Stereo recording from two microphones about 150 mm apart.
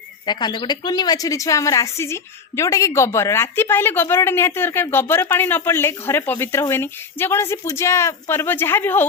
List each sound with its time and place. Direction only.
0.3 s a woman's voice: 30° left (ahead or behind); by 9.0 s 15° left (ahead or behind)